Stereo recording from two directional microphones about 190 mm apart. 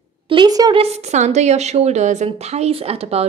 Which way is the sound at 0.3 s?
20° right (ahead or behind).